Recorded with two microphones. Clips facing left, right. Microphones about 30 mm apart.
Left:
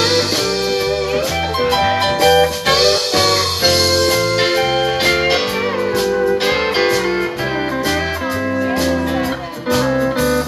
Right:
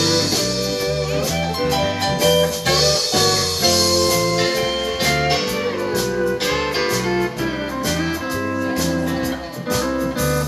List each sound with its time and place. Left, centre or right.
2.2 s music: left
9.9 s music: left